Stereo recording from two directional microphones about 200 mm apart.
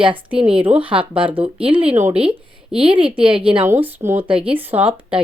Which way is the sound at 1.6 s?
25° right (ahead or behind).